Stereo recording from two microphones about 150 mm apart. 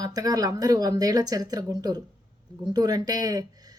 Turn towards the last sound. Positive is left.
turn(degrees=-25)  # may be behind; listen again after turning